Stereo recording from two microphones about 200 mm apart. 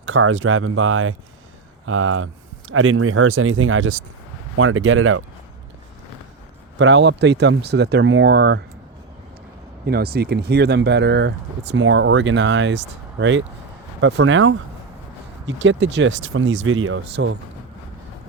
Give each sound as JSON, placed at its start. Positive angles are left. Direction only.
{"t": 0.0, "sound": "speech", "side_deg": -75}
{"t": 6.7, "sound": "speech", "side_deg": -65}
{"t": 9.8, "sound": "speech", "side_deg": -50}
{"t": 15.4, "sound": "speech", "side_deg": -70}